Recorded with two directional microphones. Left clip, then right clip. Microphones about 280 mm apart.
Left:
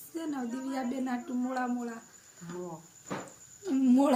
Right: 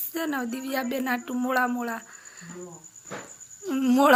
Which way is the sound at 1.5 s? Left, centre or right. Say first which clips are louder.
Right 11 dB; centre.